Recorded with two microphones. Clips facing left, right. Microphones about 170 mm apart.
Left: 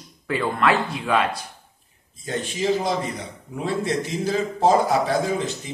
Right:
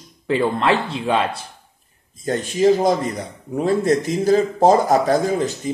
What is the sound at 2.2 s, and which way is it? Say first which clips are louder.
A man's voice: right 8 dB; 45° right (ahead or behind).